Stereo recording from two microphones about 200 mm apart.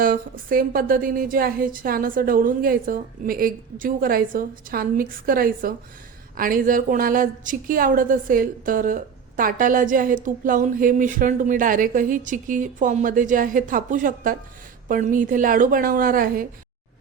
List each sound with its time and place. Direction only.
0.0 s a woman's voice: 45° right (ahead or behind)